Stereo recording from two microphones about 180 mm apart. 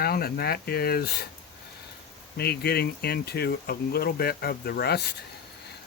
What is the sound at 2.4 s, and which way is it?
Speech, 60° left (ahead or behind).